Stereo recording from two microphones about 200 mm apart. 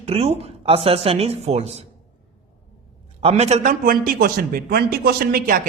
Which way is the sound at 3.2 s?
30° right (ahead or behind).